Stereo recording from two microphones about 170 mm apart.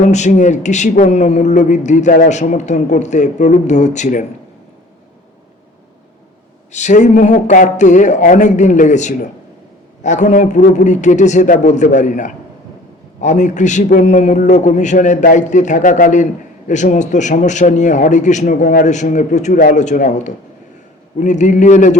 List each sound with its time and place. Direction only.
0.0 s a man's voice: 45° left (ahead or behind)
6.7 s a man's voice: 45° left (ahead or behind)
18.6 s a man's voice: 55° left (ahead or behind)